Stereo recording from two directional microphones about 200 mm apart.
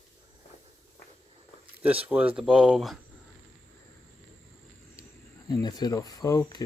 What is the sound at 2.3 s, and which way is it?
Speech, centre (ahead or behind).